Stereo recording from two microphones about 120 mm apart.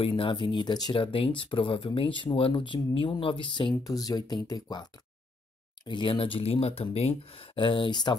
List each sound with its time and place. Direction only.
0.0 s speech: 45° left (ahead or behind)
0.9 s speech: 45° left (ahead or behind)
3.8 s speech: 30° left (ahead or behind)
5.9 s speech: 40° left (ahead or behind)